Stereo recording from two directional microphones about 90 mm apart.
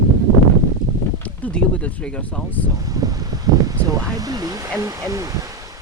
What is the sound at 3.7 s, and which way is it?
Speech, 45° right (ahead or behind).